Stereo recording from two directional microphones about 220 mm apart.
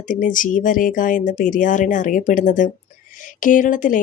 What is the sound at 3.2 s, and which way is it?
Speech, 35° left (ahead or behind).